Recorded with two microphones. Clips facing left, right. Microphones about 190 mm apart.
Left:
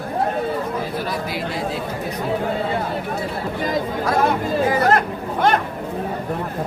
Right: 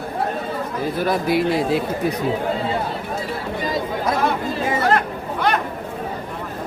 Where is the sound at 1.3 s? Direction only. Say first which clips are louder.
Right 7 dB; 60° right (ahead or behind).